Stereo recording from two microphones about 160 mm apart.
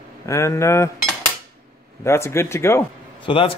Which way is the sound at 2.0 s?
15° left (ahead or behind).